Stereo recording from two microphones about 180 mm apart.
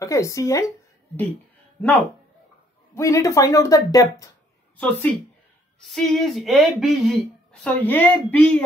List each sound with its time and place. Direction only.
0.0 s speech: 15° left (ahead or behind)
2.9 s speech: 15° left (ahead or behind)
4.7 s speech: 10° left (ahead or behind)
5.9 s a sound: centre (ahead or behind)
7.6 s speech: 10° left (ahead or behind)